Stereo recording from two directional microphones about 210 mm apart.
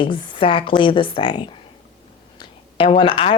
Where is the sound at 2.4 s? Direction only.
25° left (ahead or behind).